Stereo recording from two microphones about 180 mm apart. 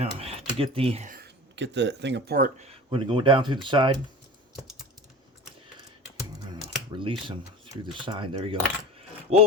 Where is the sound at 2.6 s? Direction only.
25° right (ahead or behind).